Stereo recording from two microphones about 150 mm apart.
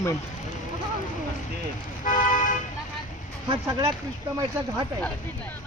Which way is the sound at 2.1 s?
60° left (ahead or behind).